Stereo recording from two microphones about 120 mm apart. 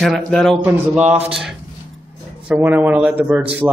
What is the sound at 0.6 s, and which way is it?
Speech, 15° right (ahead or behind).